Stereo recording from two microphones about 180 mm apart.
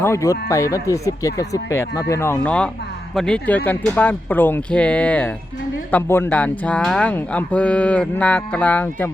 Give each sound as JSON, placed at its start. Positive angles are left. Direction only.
{"t": 0.0, "sound": "speech", "side_deg": 15}